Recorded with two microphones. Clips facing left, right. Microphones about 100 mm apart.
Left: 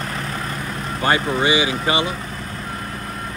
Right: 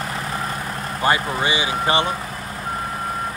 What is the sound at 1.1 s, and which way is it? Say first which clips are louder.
Speech: left 3 dB; 25° left (ahead or behind).